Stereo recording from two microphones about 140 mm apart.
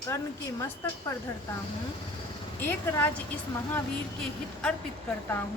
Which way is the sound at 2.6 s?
15° left (ahead or behind).